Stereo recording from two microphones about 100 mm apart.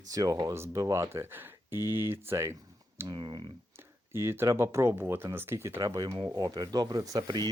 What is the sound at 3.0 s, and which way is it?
Speech, 45° right (ahead or behind).